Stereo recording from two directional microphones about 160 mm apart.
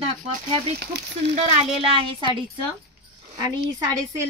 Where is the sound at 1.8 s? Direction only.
35° right (ahead or behind).